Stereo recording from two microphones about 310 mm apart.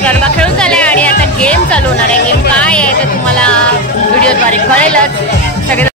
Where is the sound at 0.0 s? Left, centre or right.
Centre.